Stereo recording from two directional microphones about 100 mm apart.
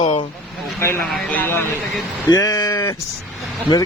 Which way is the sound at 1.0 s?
5° left (ahead or behind).